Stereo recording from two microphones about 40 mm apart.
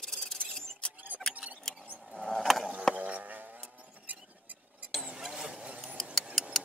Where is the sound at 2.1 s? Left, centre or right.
Centre.